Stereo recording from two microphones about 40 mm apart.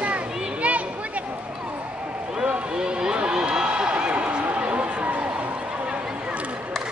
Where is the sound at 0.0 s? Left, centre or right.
Right.